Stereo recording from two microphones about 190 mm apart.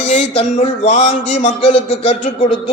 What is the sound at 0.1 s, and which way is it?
A man's voice, 35° left (ahead or behind).